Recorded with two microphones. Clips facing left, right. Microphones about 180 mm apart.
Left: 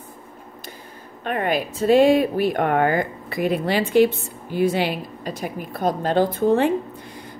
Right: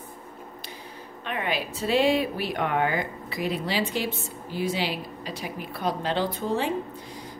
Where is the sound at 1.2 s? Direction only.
50° left (ahead or behind).